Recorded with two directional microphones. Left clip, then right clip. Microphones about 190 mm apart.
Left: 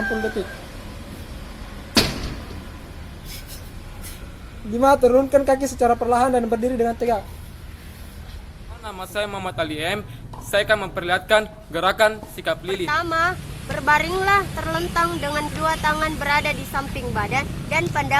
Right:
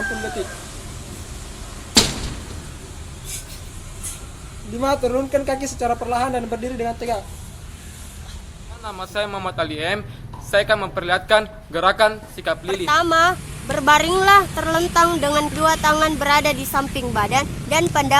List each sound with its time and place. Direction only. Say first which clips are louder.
4.8 s speech: left 5 dB; 50° left (ahead or behind)
8.8 s a man's voice: right 2 dB; centre (ahead or behind)
12.8 s speech: right 6 dB; 55° right (ahead or behind)